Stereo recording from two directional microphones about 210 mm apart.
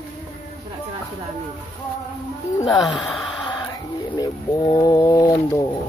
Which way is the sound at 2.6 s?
20° left (ahead or behind).